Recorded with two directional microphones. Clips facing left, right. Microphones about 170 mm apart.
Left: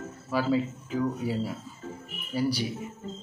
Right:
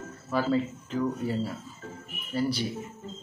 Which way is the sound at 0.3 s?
10° left (ahead or behind).